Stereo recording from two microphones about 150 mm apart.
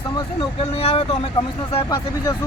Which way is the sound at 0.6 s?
40° left (ahead or behind).